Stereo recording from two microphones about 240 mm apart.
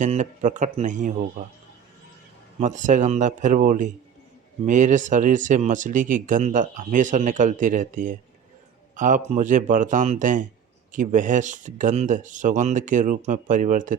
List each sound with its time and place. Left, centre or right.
0.0 s speech: right
2.6 s speech: right